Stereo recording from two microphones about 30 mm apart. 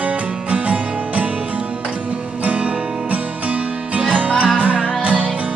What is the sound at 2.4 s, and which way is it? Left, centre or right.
Music, right.